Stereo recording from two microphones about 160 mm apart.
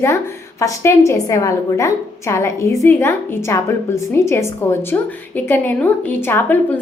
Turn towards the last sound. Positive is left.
turn(degrees=10)  # may be behind; listen again after turning